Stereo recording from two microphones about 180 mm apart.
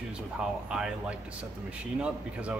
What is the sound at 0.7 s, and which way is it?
Speech, 5° right (ahead or behind).